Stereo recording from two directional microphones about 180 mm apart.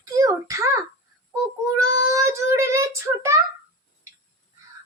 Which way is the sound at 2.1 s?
15° right (ahead or behind).